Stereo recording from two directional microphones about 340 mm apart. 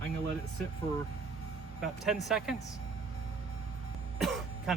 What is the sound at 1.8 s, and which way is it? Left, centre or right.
Speech, centre.